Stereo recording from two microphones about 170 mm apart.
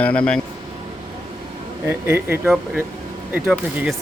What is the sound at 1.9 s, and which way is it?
Speech, 10° right (ahead or behind).